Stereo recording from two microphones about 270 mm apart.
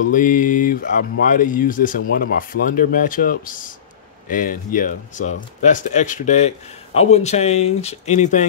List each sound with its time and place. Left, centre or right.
0.1 s speech: left